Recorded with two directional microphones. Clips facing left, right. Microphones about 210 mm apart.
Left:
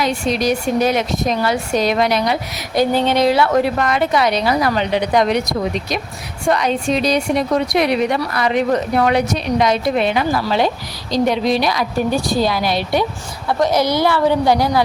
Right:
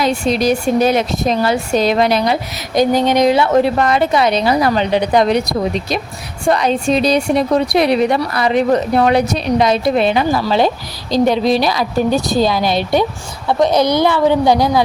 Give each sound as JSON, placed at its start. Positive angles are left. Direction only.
{"t": 0.0, "sound": "a woman's voice", "side_deg": -30}
{"t": 2.7, "sound": "a woman's voice", "side_deg": -15}
{"t": 12.1, "sound": "a woman's voice", "side_deg": -20}